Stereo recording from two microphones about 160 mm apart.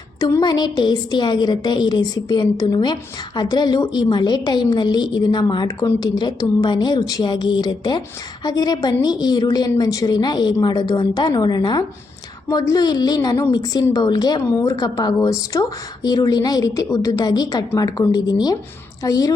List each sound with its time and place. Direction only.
0.2 s a woman's voice: 25° left (ahead or behind)